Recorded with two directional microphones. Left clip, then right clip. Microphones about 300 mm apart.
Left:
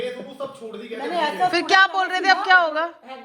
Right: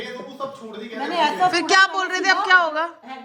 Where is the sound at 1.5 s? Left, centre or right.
Centre.